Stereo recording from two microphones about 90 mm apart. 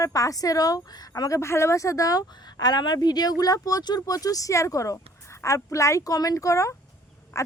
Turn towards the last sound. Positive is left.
turn(degrees=35)  # may be behind; listen again after turning